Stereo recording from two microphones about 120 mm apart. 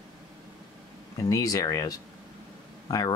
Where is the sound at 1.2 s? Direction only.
30° left (ahead or behind).